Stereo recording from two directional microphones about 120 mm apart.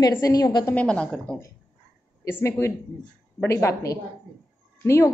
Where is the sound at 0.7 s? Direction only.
10° left (ahead or behind).